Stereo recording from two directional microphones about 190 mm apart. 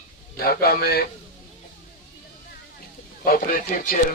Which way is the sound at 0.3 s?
55° left (ahead or behind).